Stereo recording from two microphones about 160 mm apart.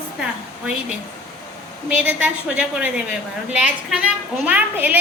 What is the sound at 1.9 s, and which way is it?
A woman's voice, 10° right (ahead or behind).